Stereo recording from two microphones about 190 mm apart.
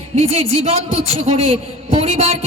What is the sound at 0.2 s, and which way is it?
Speech, 35° right (ahead or behind).